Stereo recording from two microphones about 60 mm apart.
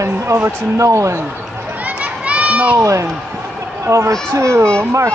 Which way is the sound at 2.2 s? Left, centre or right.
Right.